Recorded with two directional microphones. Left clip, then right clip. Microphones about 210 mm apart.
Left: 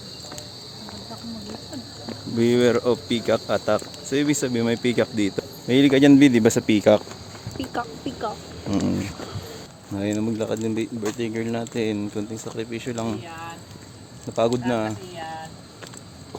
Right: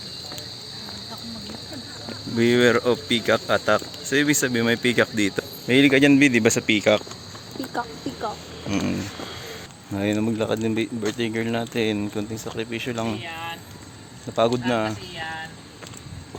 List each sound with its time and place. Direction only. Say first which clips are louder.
2.4 s speech: right 1 dB; 5° left (ahead or behind); by 7.0 s 30° left (ahead or behind)
7.7 s speech: even; 10° left (ahead or behind)
9.9 s speech: right 2 dB; 10° right (ahead or behind)
13.1 s speech: right 3 dB; 35° left (ahead or behind)
14.3 s speech: right 1 dB; centre (ahead or behind)